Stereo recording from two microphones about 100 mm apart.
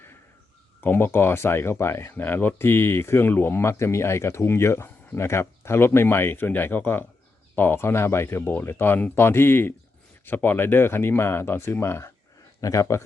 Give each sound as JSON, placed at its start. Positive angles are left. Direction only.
{"t": 0.8, "sound": "speech", "side_deg": 20}